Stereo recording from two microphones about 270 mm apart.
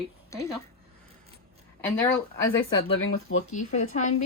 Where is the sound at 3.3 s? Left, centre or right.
Left.